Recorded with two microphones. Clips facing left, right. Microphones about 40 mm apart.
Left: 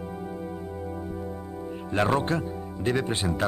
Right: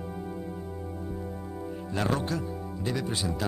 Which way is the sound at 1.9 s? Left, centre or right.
Left.